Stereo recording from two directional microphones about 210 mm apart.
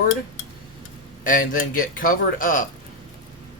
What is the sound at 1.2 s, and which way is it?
Speech, 40° left (ahead or behind).